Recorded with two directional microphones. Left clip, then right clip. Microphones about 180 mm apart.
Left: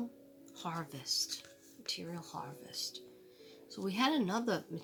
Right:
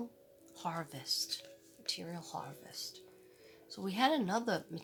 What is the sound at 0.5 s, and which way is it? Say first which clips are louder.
Speech: right 1 dB; 10° right (ahead or behind).